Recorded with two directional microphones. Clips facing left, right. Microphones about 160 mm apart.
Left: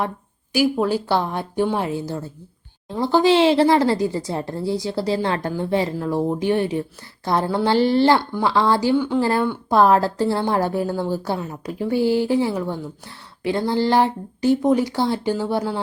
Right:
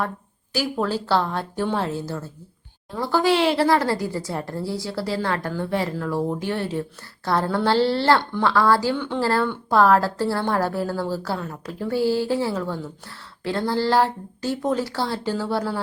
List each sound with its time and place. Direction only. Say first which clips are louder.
0.5 s a woman's voice: left 5 dB; 10° left (ahead or behind)
9.0 s a woman's voice: left 6 dB; 10° left (ahead or behind)
9.2 s a woman's voice: left 2 dB; 20° left (ahead or behind)